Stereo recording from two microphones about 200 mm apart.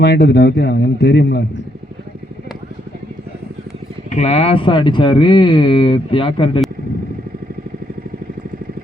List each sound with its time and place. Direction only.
0.0 s speech: 55° left (ahead or behind)
4.1 s speech: 35° left (ahead or behind)